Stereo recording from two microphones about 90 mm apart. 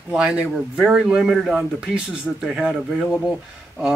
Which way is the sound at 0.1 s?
10° right (ahead or behind).